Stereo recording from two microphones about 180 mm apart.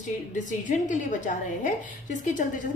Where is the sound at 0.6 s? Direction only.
45° left (ahead or behind).